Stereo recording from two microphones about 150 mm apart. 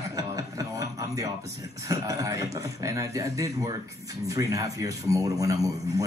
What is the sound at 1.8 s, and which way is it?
A man's voice, 20° right (ahead or behind).